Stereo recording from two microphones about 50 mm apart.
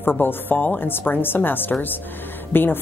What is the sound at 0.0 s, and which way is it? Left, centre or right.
Speech, left.